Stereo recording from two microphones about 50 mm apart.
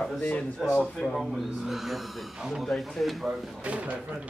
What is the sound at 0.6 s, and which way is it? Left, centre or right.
Speech, centre.